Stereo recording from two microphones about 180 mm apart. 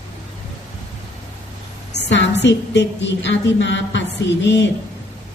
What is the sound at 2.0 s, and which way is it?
A woman's voice, 85° left.